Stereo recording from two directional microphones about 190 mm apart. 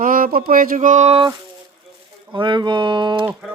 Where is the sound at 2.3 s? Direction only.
25° right (ahead or behind).